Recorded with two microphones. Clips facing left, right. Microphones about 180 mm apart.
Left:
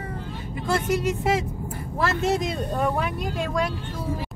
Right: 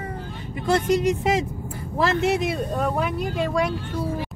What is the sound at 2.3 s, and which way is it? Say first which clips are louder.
Speech: right 1 dB; 5° right (ahead or behind).